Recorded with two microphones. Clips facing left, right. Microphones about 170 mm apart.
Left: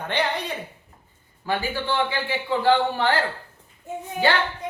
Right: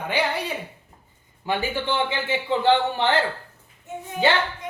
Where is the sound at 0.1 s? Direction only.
5° right (ahead or behind).